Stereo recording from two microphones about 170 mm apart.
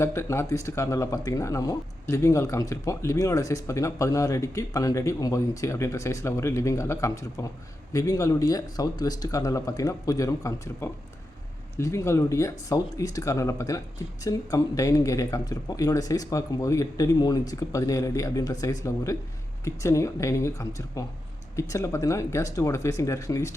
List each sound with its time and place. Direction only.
0.0 s speech: 15° left (ahead or behind)